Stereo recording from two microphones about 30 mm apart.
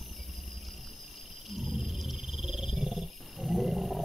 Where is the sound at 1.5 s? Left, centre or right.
Centre.